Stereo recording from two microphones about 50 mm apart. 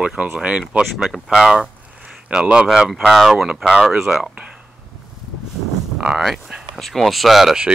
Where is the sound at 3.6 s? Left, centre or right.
Centre.